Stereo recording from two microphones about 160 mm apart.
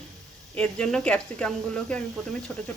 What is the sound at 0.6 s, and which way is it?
Speech, 5° left (ahead or behind).